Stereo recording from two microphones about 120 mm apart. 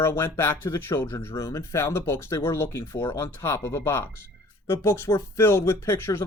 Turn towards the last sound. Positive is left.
turn(degrees=20)  # may be behind; listen again after turning